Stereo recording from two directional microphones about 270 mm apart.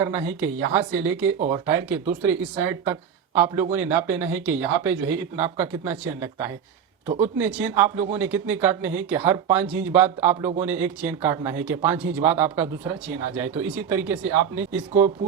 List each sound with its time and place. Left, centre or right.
0.3 s a woman's voice: centre